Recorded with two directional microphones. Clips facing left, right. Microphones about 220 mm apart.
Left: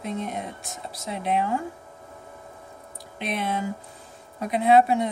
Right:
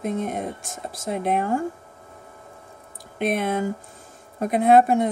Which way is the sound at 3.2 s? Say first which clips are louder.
Right 5 dB; 50° right (ahead or behind).